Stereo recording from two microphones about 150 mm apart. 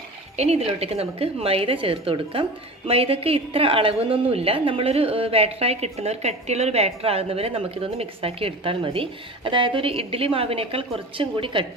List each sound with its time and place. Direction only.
0.3 s a woman's voice: 45° right (ahead or behind)